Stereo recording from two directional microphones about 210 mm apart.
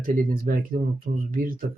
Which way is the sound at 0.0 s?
40° right (ahead or behind).